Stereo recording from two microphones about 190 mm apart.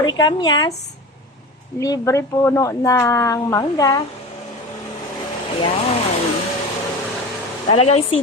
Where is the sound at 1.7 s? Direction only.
15° left (ahead or behind).